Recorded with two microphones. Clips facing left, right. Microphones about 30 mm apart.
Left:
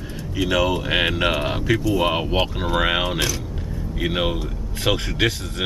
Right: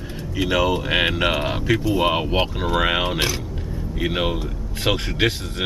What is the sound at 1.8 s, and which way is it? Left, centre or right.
Speech, centre.